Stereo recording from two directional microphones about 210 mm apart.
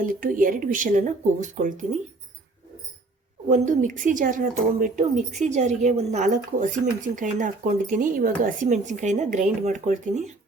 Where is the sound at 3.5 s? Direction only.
35° right (ahead or behind).